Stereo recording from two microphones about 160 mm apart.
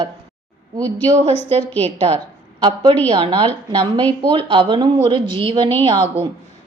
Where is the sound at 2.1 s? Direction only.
40° right (ahead or behind).